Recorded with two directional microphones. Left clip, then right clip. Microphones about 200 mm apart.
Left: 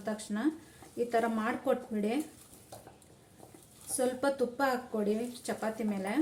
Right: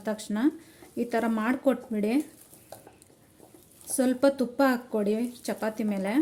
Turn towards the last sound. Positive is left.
turn(degrees=-50)  # may be behind; listen again after turning